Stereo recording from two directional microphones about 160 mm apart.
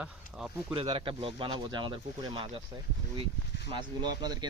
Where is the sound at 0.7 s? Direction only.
30° right (ahead or behind).